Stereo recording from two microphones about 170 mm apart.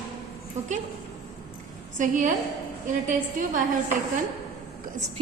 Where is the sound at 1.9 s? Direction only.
50° right (ahead or behind).